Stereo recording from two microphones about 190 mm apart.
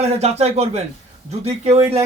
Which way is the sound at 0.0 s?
35° right (ahead or behind).